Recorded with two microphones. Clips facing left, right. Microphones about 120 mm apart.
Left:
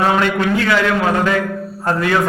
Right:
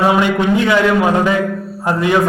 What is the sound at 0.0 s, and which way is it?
A man's voice, 15° right (ahead or behind).